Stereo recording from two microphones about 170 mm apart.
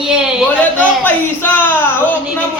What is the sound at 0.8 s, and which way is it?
Speech, 10° left (ahead or behind).